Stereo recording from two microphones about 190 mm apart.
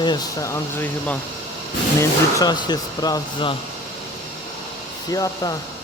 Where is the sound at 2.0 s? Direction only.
20° left (ahead or behind).